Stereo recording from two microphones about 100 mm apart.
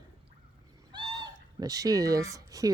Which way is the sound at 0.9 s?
45° right (ahead or behind).